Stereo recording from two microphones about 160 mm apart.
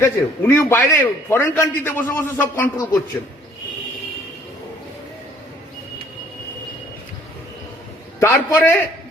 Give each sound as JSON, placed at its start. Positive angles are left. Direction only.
{"t": 0.0, "sound": "a man's voice", "side_deg": 15}
{"t": 8.2, "sound": "a man's voice", "side_deg": 15}